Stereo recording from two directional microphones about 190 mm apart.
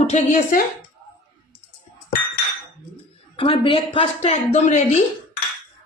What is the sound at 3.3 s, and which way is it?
A woman's voice, 25° left (ahead or behind).